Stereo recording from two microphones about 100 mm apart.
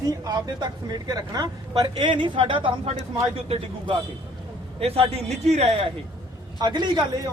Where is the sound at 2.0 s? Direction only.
55° right (ahead or behind).